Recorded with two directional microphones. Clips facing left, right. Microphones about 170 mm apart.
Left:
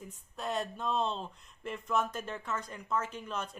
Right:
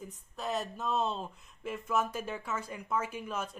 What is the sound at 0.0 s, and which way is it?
Speech, centre (ahead or behind).